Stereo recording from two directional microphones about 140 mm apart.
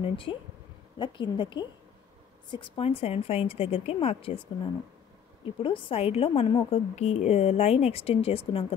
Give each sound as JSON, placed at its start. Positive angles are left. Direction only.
{"t": 0.0, "sound": "a woman's voice", "side_deg": 40}
{"t": 7.0, "sound": "a woman's voice", "side_deg": 50}